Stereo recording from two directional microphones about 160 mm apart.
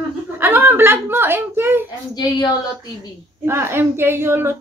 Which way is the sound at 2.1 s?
25° left (ahead or behind).